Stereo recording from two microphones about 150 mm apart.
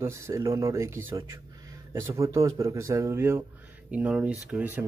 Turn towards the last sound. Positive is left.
turn(degrees=-10)  # may be behind; listen again after turning